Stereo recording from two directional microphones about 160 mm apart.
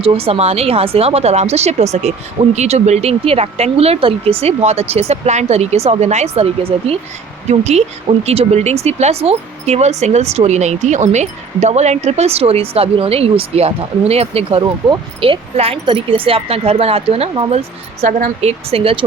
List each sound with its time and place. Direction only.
0.0 s speech: 35° right (ahead or behind)